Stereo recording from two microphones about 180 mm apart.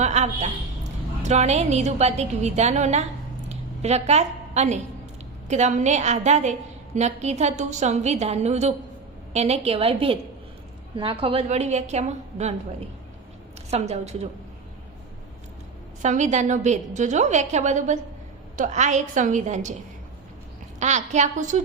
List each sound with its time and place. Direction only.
0.0 s a woman's voice: 40° right (ahead or behind)
13.7 s a woman's voice: 35° right (ahead or behind)
16.0 s a woman's voice: 40° right (ahead or behind)
20.7 s a woman's voice: 40° right (ahead or behind)